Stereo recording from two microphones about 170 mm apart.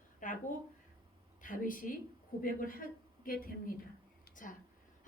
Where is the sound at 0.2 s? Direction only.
50° left (ahead or behind).